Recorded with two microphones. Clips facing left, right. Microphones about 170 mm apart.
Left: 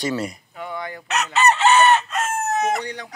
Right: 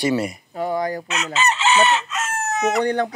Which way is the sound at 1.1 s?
65° left (ahead or behind).